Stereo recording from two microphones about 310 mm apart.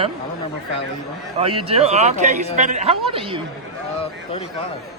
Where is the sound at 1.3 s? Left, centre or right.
Centre.